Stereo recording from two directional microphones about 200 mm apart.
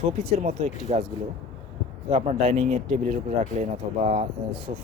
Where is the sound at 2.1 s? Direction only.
35° right (ahead or behind).